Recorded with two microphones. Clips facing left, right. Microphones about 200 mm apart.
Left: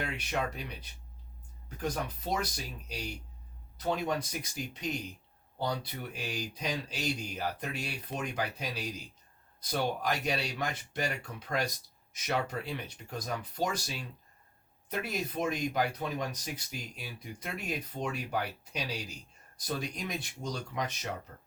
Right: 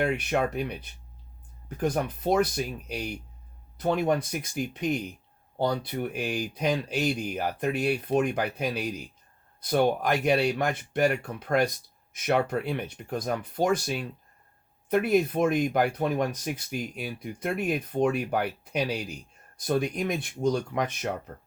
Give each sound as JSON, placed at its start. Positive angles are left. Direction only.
{"t": 0.0, "sound": "speech", "side_deg": -55}